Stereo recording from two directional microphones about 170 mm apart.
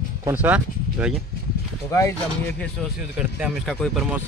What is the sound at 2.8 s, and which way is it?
A man's voice, 5° left (ahead or behind).